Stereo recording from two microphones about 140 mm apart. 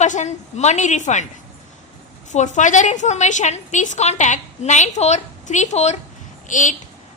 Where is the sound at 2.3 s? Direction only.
60° left (ahead or behind).